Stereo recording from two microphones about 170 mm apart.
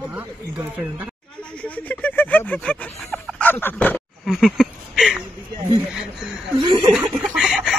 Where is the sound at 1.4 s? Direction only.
5° left (ahead or behind).